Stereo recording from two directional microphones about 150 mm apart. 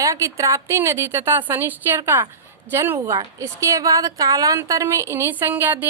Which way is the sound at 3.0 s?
30° right (ahead or behind).